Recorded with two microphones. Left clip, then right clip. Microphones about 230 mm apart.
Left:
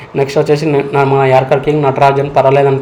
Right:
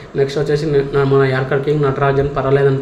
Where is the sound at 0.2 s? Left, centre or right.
Centre.